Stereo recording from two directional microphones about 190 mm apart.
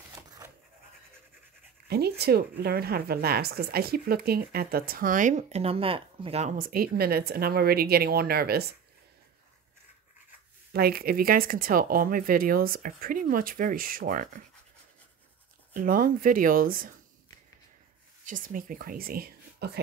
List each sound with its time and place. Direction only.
0.1 s pant: 15° right (ahead or behind)
1.9 s speech: 55° right (ahead or behind); by 6.5 s 30° right (ahead or behind)
6.6 s speech: 50° right (ahead or behind)
10.7 s speech: 55° right (ahead or behind)
15.7 s speech: 45° right (ahead or behind)
18.2 s speech: 45° right (ahead or behind)